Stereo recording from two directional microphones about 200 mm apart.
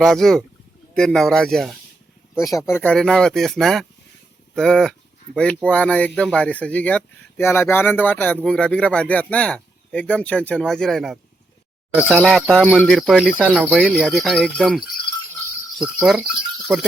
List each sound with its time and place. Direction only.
0.0 s speech: centre (ahead or behind)
2.4 s speech: 15° left (ahead or behind)
13.6 s speech: 5° right (ahead or behind)